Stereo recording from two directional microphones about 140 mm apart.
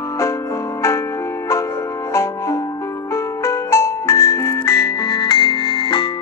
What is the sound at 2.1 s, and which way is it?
Music, 20° left (ahead or behind).